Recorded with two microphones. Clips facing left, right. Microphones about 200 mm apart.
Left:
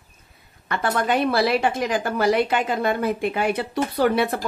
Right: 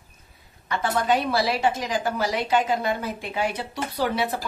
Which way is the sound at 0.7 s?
55° left (ahead or behind).